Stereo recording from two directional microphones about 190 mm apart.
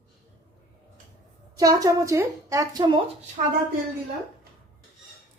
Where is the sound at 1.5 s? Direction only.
20° right (ahead or behind).